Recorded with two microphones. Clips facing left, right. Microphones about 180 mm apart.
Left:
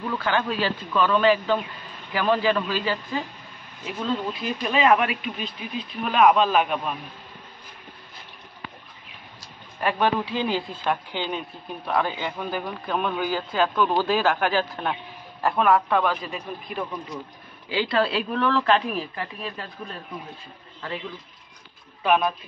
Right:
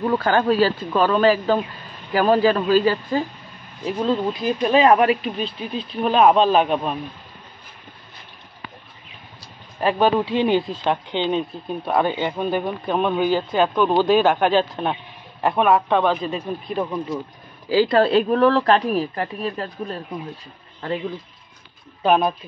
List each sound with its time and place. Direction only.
0.0 s speech: 40° right (ahead or behind)
9.8 s speech: 25° right (ahead or behind)
17.6 s speech: 40° right (ahead or behind)
22.0 s speech: 40° right (ahead or behind)